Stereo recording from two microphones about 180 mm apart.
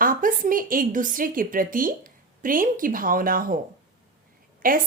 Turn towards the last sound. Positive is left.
turn(degrees=-50)  # may be behind; listen again after turning